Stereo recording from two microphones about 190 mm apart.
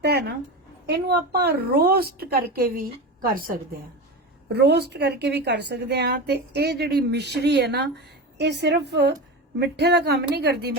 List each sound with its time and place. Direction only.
0.0 s a woman's voice: 60° right (ahead or behind)
4.4 s a woman's voice: 60° right (ahead or behind)